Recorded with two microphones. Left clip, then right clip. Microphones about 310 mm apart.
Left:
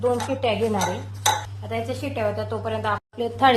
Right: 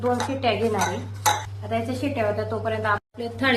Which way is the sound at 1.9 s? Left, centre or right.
Left.